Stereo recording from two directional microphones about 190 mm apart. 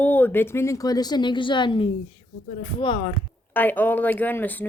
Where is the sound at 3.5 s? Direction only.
10° left (ahead or behind).